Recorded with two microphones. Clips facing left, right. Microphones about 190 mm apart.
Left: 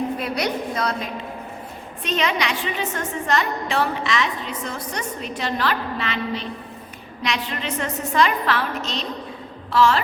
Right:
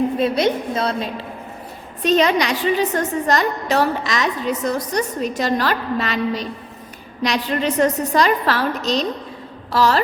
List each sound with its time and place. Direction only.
0.2 s a woman's voice: 25° right (ahead or behind)